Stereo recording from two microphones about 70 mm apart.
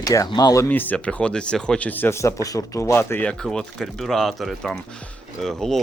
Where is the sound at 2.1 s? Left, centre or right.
Left.